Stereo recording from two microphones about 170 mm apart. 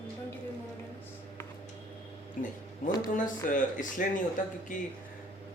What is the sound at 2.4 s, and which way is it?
Speech, 50° left (ahead or behind).